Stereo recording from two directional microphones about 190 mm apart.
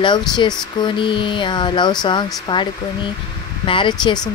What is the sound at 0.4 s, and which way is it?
Speech, 25° left (ahead or behind).